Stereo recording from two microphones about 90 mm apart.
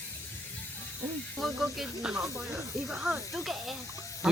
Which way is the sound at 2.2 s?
35° right (ahead or behind).